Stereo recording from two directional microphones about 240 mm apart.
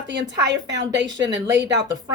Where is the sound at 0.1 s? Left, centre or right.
Right.